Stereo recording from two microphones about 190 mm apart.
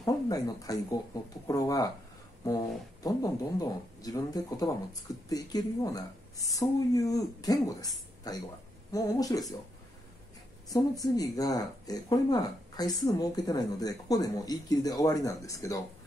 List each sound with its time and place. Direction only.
0.0 s speech: 20° left (ahead or behind)
10.7 s speech: 20° left (ahead or behind)